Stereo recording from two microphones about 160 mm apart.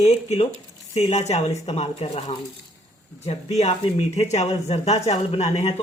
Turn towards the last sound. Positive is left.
turn(degrees=40)  # may be behind; listen again after turning